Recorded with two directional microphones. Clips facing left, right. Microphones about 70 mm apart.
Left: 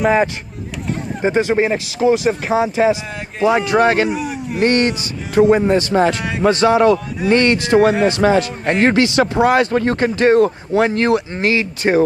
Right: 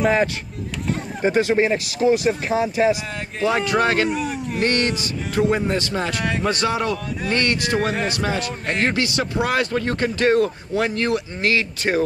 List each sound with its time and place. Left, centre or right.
0.0 s speech: centre
1.2 s speech: left
4.1 s speech: centre
4.6 s speech: left
8.2 s a man's voice: left
8.9 s speech: left